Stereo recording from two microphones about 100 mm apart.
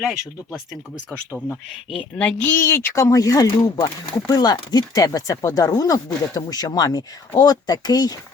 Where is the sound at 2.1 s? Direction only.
15° left (ahead or behind).